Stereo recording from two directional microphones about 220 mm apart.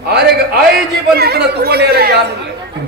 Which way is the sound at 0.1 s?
50° right (ahead or behind).